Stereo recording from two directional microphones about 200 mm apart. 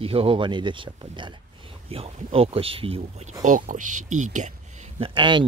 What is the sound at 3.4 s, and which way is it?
Speech, 40° right (ahead or behind).